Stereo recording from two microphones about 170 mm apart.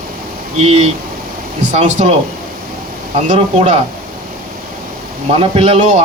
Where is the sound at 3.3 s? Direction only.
40° right (ahead or behind).